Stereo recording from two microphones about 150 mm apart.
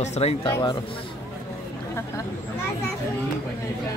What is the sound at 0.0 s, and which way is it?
Speech, 45° left (ahead or behind).